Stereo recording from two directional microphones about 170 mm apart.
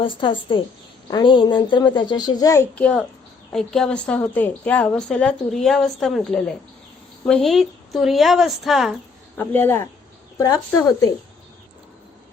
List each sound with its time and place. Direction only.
0.0 s a woman's voice: 30° left (ahead or behind); by 9.0 s centre (ahead or behind)
9.4 s a woman's voice: 10° left (ahead or behind)